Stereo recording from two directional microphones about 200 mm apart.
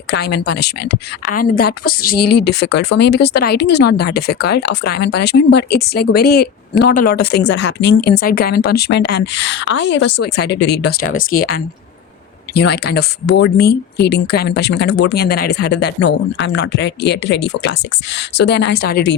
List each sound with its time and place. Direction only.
0.1 s a woman's voice: 55° left (ahead or behind)